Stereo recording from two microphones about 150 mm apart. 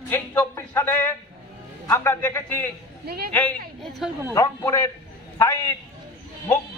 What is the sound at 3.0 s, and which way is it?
Speech, 90° right.